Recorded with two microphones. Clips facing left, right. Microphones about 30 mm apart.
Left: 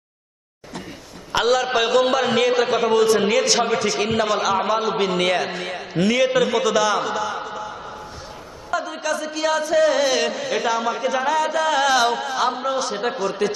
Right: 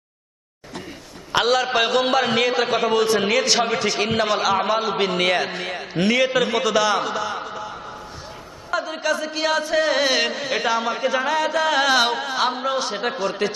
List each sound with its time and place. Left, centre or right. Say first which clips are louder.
1.3 s a man's voice: even; centre
8.7 s speech: right 1 dB; right